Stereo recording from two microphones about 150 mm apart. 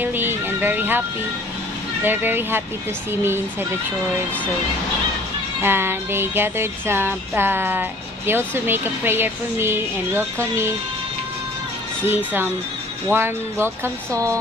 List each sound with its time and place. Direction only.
0.0 s a sound: 15° right (ahead or behind)
2.0 s a woman's voice: 15° right (ahead or behind)
5.6 s a woman's voice: 15° right (ahead or behind)
13.1 s a woman's voice: 15° right (ahead or behind)